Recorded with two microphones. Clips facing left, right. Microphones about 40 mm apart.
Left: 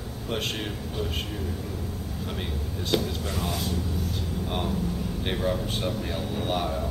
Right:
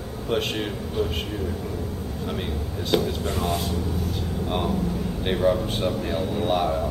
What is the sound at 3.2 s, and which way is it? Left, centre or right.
Speech, right.